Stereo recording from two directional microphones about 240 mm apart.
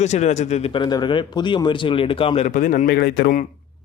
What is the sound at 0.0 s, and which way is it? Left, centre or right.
Speech, left.